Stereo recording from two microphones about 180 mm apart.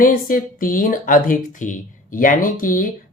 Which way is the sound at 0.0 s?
50° left (ahead or behind).